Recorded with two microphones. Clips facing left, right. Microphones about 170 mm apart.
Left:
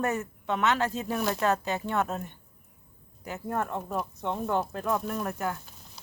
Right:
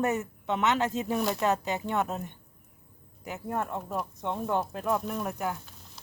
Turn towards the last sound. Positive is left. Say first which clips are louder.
# left 1 dB
turn(degrees=-15)  # may be behind; listen again after turning